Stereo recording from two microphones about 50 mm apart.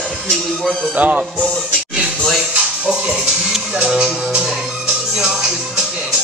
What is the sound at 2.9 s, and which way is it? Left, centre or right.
Music, centre.